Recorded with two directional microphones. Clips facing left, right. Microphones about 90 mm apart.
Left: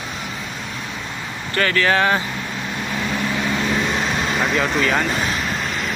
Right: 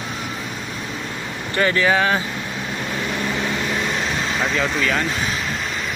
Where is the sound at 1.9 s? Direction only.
5° right (ahead or behind).